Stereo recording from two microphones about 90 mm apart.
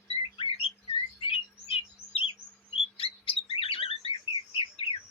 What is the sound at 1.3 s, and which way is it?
Bird, 90° left.